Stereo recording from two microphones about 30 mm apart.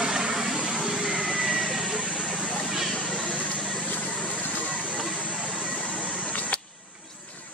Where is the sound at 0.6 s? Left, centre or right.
Centre.